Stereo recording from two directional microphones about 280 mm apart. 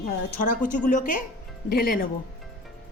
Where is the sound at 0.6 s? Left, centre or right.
Left.